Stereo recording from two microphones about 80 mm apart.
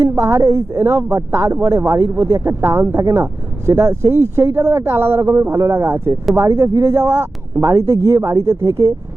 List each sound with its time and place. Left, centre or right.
0.1 s speech: right